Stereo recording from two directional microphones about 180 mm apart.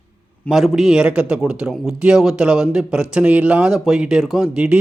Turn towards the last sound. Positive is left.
turn(degrees=-5)  # may be behind; listen again after turning